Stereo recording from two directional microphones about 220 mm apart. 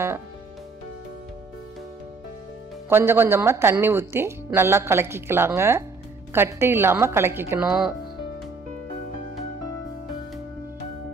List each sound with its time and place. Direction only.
2.9 s speech: 10° right (ahead or behind)